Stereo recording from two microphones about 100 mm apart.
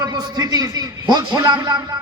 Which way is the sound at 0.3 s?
40° right (ahead or behind).